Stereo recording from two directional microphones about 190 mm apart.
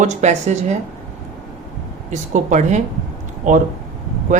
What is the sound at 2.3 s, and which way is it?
Speech, 40° right (ahead or behind).